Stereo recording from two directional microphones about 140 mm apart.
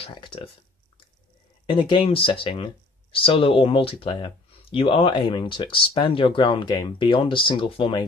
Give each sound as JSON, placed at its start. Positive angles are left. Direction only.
{"t": 0.0, "sound": "speech", "side_deg": 35}
{"t": 1.7, "sound": "speech", "side_deg": 35}